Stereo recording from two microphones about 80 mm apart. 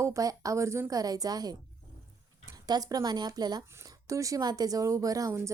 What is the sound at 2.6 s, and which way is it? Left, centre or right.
A woman's voice, right.